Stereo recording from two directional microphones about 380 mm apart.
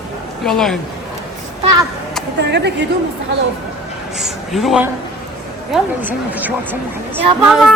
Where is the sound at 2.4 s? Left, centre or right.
Right.